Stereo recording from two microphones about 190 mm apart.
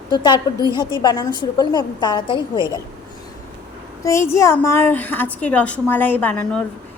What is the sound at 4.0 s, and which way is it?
A woman's voice, 15° left (ahead or behind).